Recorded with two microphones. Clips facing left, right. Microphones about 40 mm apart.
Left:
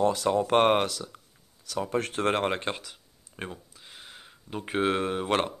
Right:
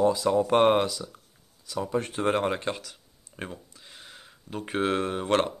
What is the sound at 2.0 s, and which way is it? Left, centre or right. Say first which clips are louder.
Speech: right 1 dB; left.